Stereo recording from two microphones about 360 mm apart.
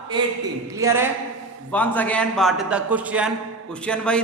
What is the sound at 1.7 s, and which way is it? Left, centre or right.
A man's voice, centre.